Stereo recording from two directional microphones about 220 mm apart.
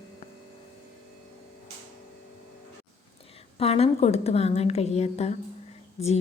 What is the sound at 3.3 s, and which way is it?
A woman's voice, 25° left (ahead or behind).